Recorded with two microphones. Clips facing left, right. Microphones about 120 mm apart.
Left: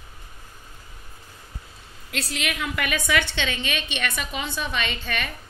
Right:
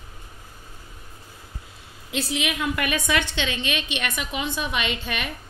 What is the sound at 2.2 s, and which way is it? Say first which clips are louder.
Speech: right 3 dB; 10° right (ahead or behind).